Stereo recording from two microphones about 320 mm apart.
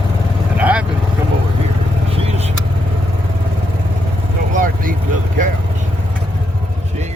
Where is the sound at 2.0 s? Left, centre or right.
Centre.